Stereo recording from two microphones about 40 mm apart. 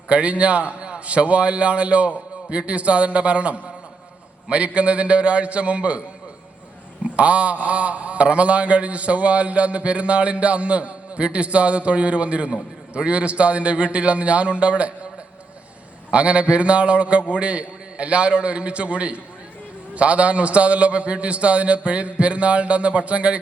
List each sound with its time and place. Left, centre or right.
0.1 s a man's voice: right
7.2 s a man's voice: right
16.1 s a man's voice: right